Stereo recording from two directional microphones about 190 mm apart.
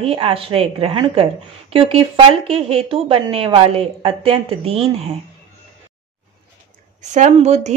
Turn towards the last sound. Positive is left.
turn(degrees=-35)  # may be behind; listen again after turning